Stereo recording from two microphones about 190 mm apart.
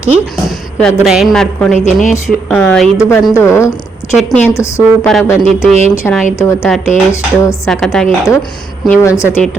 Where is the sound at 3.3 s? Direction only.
15° left (ahead or behind).